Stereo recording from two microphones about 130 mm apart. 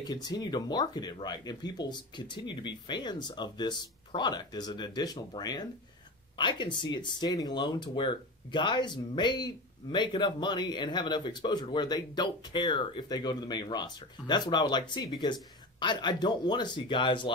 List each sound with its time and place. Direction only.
0.0 s speech: 30° left (ahead or behind)